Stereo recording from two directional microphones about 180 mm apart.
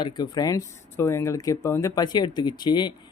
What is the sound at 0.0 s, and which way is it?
Speech, 20° left (ahead or behind).